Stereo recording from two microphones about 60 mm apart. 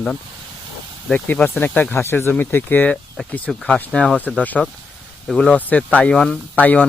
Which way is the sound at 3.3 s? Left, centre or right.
Left.